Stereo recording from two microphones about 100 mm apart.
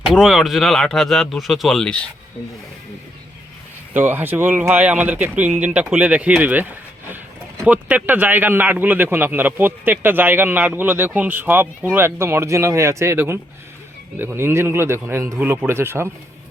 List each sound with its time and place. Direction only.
0.0 s speech: 5° right (ahead or behind)
3.9 s speech: 20° right (ahead or behind)
7.7 s speech: 15° right (ahead or behind)